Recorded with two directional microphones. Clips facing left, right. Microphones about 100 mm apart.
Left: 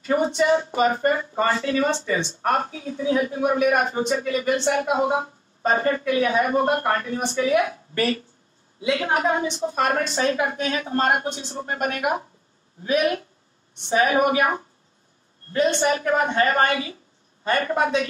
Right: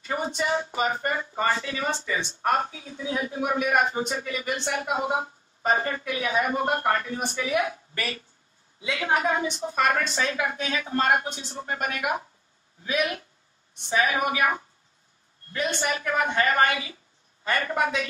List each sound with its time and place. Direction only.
0.0 s a woman's voice: 40° left (ahead or behind)